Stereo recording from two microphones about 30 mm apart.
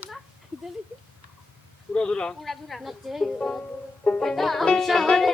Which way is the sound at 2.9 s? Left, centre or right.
Centre.